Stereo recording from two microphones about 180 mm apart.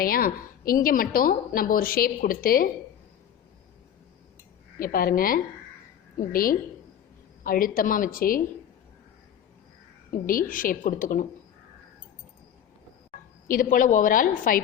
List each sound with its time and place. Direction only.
0.0 s a woman's voice: 55° left (ahead or behind)
4.8 s a woman's voice: 55° left (ahead or behind)
10.1 s a woman's voice: 50° left (ahead or behind)
13.5 s a woman's voice: 50° left (ahead or behind)